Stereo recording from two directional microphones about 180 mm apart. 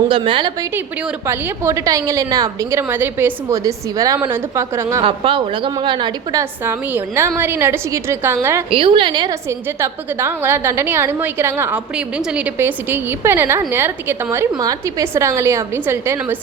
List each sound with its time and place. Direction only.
0.1 s a woman's voice: 25° right (ahead or behind)
0.7 s a woman's voice: 10° right (ahead or behind)
5.0 s a woman's voice: 30° right (ahead or behind)
6.4 s a woman's voice: 10° right (ahead or behind)
8.7 s a woman's voice: 30° right (ahead or behind); by 16.4 s 10° right (ahead or behind)